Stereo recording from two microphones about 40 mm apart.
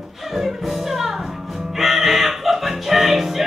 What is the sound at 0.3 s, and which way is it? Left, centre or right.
Music, centre.